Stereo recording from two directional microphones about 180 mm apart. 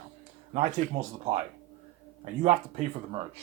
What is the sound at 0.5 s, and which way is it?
Speech, 35° right (ahead or behind).